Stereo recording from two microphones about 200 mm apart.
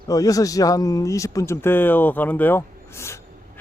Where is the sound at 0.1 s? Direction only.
15° left (ahead or behind).